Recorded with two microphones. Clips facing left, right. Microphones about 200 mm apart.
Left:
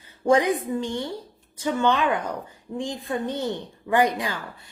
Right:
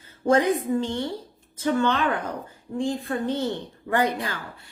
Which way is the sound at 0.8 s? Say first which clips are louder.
Right 1 dB; 15° left (ahead or behind).